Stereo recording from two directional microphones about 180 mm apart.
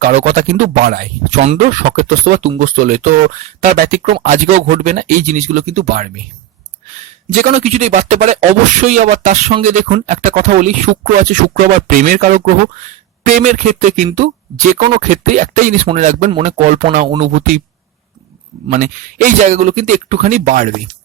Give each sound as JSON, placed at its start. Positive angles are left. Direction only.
{"t": 0.0, "sound": "speech", "side_deg": -45}
{"t": 7.3, "sound": "speech", "side_deg": -45}
{"t": 18.7, "sound": "speech", "side_deg": -45}